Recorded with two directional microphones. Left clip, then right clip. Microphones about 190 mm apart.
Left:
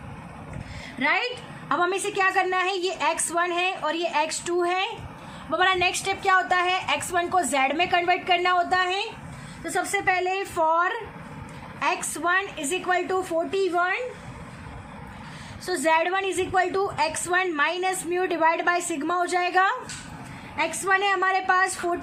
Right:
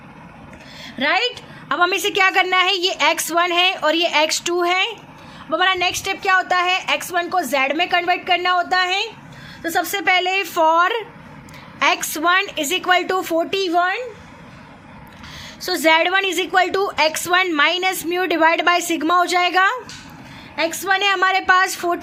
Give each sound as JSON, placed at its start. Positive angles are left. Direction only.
{"t": 0.9, "sound": "a woman's voice", "side_deg": -45}
{"t": 5.5, "sound": "a woman's voice", "side_deg": -30}
{"t": 15.6, "sound": "a woman's voice", "side_deg": -45}